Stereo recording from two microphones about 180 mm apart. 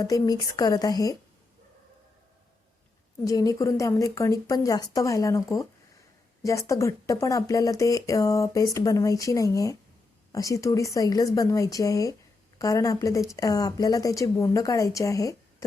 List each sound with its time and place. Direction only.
0.0 s speech: 20° left (ahead or behind)
3.2 s speech: 20° left (ahead or behind)